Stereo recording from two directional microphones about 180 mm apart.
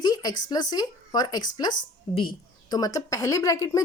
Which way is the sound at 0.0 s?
20° left (ahead or behind).